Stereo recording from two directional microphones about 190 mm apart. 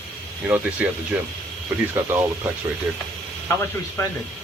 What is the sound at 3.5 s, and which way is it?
Speech, 15° left (ahead or behind).